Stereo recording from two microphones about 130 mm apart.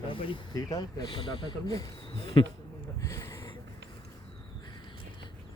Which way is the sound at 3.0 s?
25° left (ahead or behind).